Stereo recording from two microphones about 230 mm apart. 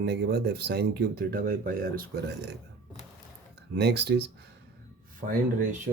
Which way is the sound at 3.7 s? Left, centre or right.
Right.